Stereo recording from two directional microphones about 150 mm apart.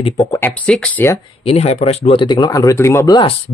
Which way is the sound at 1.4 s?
45° left (ahead or behind).